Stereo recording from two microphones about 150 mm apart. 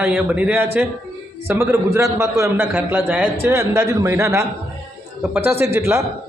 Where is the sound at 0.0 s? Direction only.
10° right (ahead or behind).